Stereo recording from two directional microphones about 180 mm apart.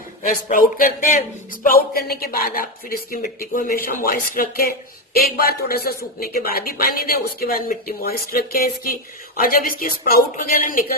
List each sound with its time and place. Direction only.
0.2 s speech: 45° left (ahead or behind)